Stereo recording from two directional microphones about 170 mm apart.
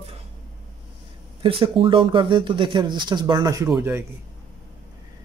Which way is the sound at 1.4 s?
30° right (ahead or behind).